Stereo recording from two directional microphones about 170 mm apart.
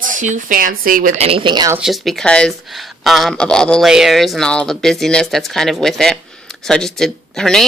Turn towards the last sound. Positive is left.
turn(degrees=0)  # may be behind; listen again after turning